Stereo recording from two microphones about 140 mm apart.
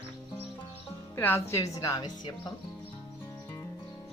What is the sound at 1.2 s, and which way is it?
A woman's voice, 15° left (ahead or behind).